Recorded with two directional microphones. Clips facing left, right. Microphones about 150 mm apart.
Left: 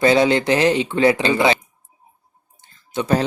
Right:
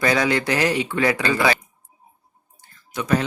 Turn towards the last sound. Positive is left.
turn(degrees=30)  # may be behind; listen again after turning